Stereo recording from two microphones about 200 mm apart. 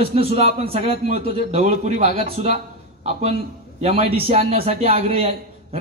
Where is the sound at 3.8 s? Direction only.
30° right (ahead or behind).